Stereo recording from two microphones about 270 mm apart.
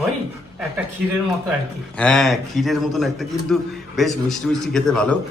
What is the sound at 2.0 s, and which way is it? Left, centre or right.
A man's voice, centre.